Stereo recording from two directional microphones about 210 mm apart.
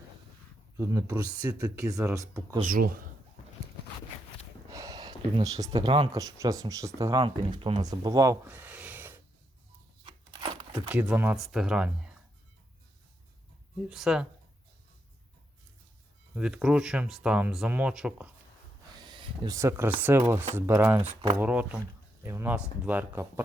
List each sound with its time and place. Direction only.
0.8 s speech: 15° right (ahead or behind)
2.6 s speech: 45° right (ahead or behind)
4.7 s speech: 15° right (ahead or behind)
10.0 s a sound: 25° right (ahead or behind)
10.8 s speech: 5° right (ahead or behind)
13.8 s speech: centre (ahead or behind)
16.3 s speech: 5° right (ahead or behind)
18.9 s speech: 20° right (ahead or behind)